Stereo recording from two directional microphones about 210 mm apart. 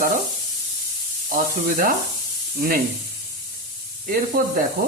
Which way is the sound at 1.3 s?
40° right (ahead or behind).